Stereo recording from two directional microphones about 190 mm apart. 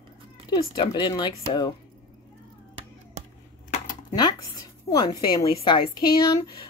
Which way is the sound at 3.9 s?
20° left (ahead or behind).